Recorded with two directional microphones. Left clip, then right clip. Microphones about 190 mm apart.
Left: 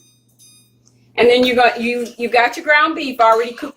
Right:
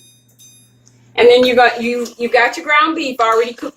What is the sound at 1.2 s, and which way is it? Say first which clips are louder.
Speech: right 3 dB; 30° left (ahead or behind).